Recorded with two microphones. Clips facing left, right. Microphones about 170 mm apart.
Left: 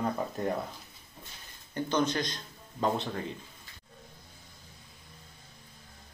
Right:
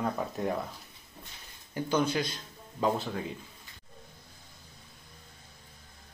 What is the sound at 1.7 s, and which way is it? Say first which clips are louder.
Speech: right 1 dB; 10° right (ahead or behind).